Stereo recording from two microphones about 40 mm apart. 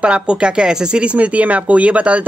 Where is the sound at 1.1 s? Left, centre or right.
Right.